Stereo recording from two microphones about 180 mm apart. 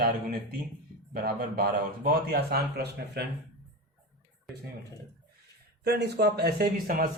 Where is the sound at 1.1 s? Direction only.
55° right (ahead or behind).